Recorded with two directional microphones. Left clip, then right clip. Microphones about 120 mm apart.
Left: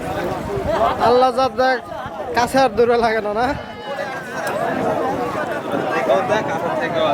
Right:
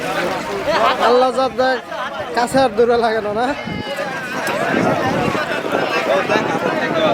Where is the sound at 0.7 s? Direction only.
25° right (ahead or behind).